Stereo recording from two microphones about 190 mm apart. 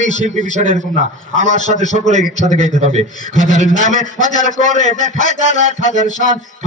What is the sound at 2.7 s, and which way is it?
Speech, 35° right (ahead or behind).